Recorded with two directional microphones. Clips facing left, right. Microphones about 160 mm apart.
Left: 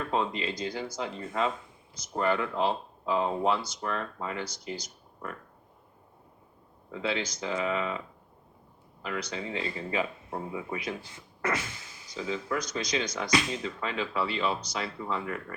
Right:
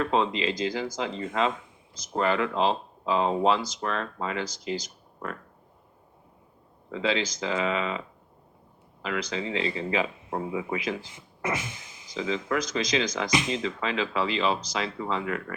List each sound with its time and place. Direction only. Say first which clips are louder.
0.0 s speech: right 5 dB; 90° right
6.9 s speech: right 4 dB; 90° right
11.1 s speech: right 1 dB; 15° right (ahead or behind)
12.1 s speech: right 4 dB; 90° right